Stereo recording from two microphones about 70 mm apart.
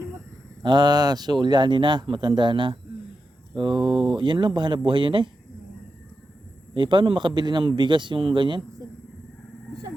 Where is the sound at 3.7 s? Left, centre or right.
Right.